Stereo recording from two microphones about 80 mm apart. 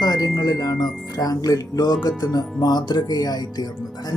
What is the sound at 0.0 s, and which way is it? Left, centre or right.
Speech, left.